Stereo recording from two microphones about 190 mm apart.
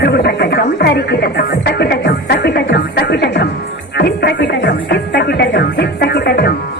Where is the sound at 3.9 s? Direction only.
55° left (ahead or behind).